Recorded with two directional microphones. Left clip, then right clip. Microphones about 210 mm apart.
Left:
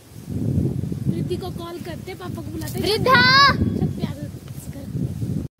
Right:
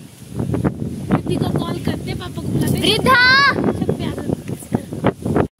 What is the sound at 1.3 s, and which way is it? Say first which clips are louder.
Speech: right 7 dB; 5° left (ahead or behind).